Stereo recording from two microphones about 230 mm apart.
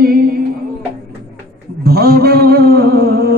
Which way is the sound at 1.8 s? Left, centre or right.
Right.